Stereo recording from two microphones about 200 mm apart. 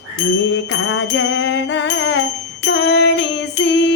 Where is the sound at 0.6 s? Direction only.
65° left (ahead or behind).